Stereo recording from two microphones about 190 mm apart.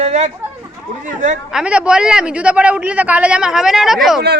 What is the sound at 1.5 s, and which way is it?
A man's voice, 5° right (ahead or behind).